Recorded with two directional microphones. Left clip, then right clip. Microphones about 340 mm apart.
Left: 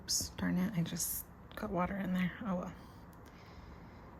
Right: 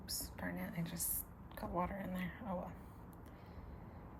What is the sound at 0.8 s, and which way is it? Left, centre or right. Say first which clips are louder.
Speech: left 6 dB; centre.